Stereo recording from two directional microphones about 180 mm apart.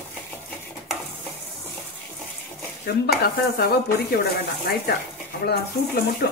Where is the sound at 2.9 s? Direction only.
60° left (ahead or behind).